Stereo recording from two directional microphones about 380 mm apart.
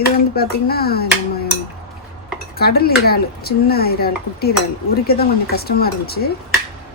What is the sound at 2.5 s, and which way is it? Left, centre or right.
Speech, left.